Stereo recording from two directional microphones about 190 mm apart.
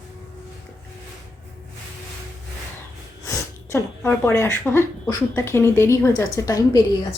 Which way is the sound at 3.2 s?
10° left (ahead or behind).